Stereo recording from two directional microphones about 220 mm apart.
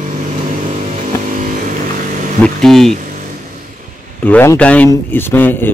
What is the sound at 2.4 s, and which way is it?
Speech, centre (ahead or behind).